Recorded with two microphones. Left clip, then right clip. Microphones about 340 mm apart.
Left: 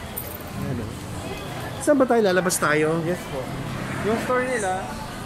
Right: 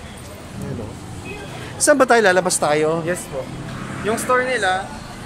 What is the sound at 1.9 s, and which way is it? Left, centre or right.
Speech, right.